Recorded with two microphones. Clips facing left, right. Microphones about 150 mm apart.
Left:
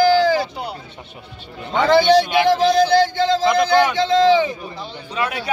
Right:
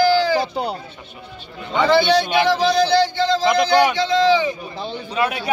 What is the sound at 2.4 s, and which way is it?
A man's voice, 50° left (ahead or behind).